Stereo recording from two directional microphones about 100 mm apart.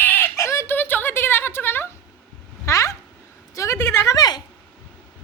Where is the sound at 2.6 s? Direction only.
30° left (ahead or behind).